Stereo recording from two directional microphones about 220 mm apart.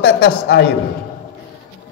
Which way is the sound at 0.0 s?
50° left (ahead or behind).